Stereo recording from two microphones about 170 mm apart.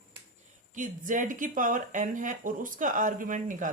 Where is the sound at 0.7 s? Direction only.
50° right (ahead or behind).